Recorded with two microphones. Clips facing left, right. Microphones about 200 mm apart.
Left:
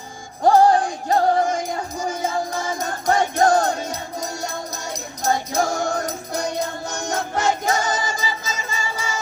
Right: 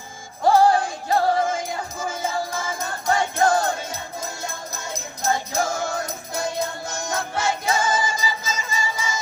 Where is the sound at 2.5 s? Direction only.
40° left (ahead or behind).